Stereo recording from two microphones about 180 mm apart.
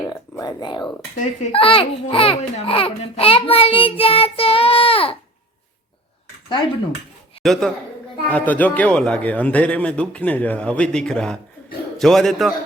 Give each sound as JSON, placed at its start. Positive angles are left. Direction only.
{"t": 0.1, "sound": "speech", "side_deg": 20}
{"t": 1.1, "sound": "a child's voice", "side_deg": 40}
{"t": 7.4, "sound": "a man's voice", "side_deg": 0}